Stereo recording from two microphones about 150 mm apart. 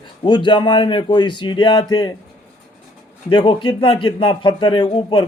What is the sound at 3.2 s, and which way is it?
Speech, 35° left (ahead or behind).